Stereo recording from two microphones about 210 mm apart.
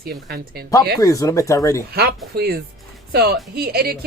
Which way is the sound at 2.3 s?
50° right (ahead or behind).